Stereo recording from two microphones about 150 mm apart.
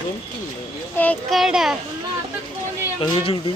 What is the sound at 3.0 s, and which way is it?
Speech, 35° left (ahead or behind).